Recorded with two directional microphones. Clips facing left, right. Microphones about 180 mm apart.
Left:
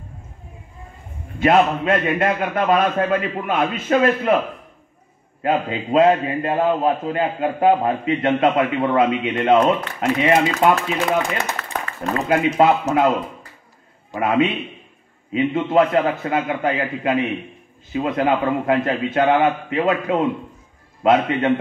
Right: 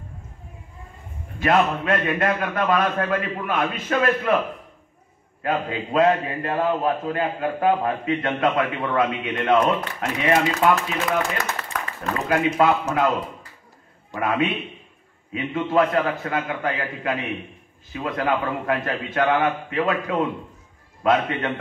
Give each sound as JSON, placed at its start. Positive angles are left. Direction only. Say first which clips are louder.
{"t": 1.4, "sound": "a man's voice", "louder": "left 4 dB", "side_deg": 20}
{"t": 5.4, "sound": "a man's voice", "louder": "left 4 dB", "side_deg": 20}
{"t": 11.7, "sound": "a sound", "louder": "left 4 dB", "side_deg": 30}
{"t": 12.5, "sound": "a man's voice", "louder": "left 4 dB", "side_deg": 25}
{"t": 14.1, "sound": "a man's voice", "louder": "left 4 dB", "side_deg": 25}